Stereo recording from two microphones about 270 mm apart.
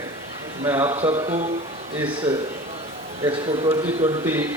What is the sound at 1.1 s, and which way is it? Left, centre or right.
Speech, right.